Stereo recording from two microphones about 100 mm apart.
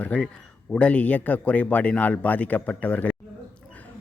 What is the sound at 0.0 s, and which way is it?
A man's voice, 15° left (ahead or behind).